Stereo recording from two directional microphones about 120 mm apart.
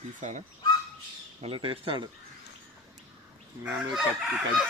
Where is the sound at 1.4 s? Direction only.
45° right (ahead or behind).